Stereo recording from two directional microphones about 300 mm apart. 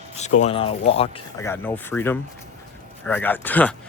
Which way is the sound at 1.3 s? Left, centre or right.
Centre.